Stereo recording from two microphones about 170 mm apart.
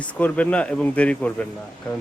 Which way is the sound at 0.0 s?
5° left (ahead or behind).